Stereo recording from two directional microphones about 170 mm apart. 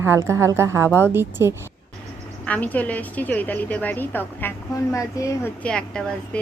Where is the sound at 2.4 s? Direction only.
10° left (ahead or behind).